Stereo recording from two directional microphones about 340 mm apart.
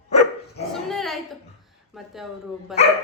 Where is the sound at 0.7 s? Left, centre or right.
Centre.